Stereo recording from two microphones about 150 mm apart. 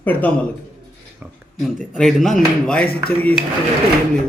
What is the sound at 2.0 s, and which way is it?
Speech, centre (ahead or behind).